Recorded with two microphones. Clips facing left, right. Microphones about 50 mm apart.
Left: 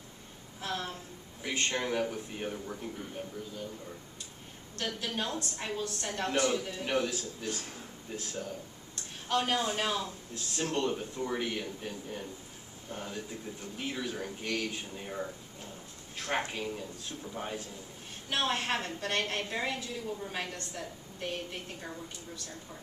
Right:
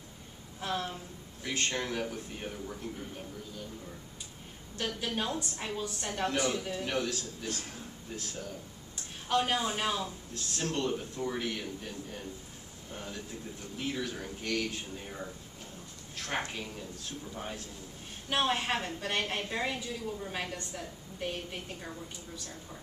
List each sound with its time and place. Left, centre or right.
0.6 s a woman's voice: centre
1.4 s a man's voice: centre
4.7 s a woman's voice: centre
6.8 s a man's voice: centre
9.3 s a woman's voice: centre
10.3 s a man's voice: centre
18.3 s a woman's voice: centre